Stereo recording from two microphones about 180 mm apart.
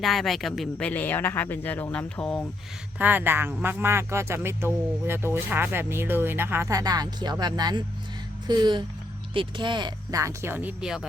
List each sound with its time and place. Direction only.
0.0 s speech: centre (ahead or behind)
3.0 s speech: 10° right (ahead or behind)
8.4 s a sound: 25° right (ahead or behind)
9.3 s speech: 25° right (ahead or behind); by 11.0 s 5° right (ahead or behind)